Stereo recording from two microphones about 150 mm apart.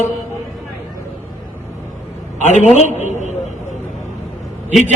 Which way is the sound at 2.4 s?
50° left (ahead or behind).